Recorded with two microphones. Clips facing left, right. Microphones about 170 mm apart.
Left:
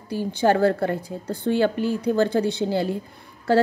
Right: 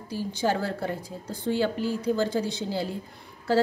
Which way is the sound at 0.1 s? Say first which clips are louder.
Left 6 dB; 60° left (ahead or behind).